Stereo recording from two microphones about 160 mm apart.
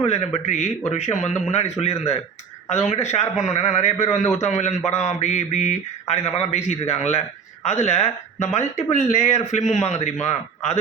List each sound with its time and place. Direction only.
0.0 s a man's voice: 40° left (ahead or behind)
0.4 s mantra: 45° left (ahead or behind)
1.8 s speech: 40° left (ahead or behind)
2.8 s mantra: 45° left (ahead or behind)
7.6 s speech: 45° left (ahead or behind)
8.5 s mantra: 45° left (ahead or behind)